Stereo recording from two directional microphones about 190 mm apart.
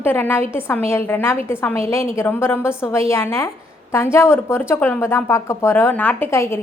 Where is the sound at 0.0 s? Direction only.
10° left (ahead or behind).